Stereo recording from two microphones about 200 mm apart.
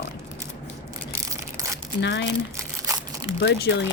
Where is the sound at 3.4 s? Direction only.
60° left (ahead or behind).